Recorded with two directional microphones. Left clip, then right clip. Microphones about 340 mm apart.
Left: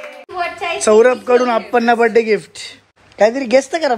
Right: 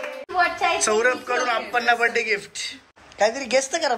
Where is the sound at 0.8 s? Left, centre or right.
Centre.